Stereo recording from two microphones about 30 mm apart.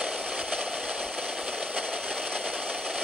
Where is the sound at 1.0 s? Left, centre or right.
Right.